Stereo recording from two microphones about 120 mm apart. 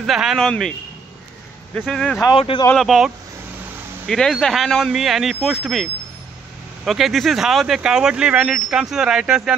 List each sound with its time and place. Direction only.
0.0 s speech: centre (ahead or behind)
1.9 s speech: 5° left (ahead or behind)
2.3 s speech: 50° left (ahead or behind)
2.7 s speech: centre (ahead or behind)
4.1 s speech: 5° left (ahead or behind)